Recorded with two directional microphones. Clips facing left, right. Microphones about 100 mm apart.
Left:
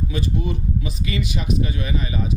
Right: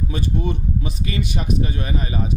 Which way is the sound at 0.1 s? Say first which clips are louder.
Right 2 dB; 45° right (ahead or behind).